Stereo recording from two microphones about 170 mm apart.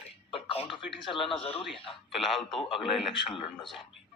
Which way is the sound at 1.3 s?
30° left (ahead or behind).